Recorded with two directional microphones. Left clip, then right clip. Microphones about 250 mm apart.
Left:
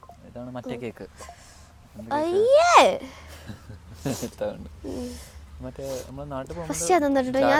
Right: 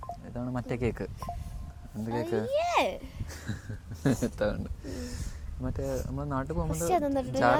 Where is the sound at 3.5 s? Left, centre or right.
Right.